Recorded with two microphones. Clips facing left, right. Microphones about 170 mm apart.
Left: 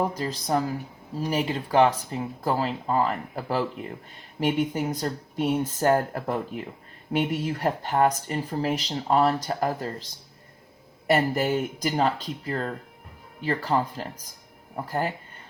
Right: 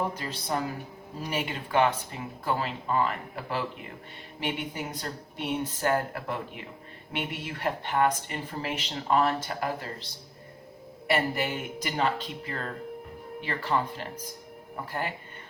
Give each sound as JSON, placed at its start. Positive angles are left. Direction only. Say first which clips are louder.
{"t": 0.1, "sound": "speech", "louder": "left 6 dB", "side_deg": 40}